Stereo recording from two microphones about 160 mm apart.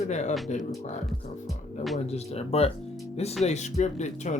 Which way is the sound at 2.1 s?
40° left (ahead or behind).